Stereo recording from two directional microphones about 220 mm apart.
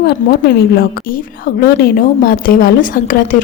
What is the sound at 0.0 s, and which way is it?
Speech, 45° left (ahead or behind).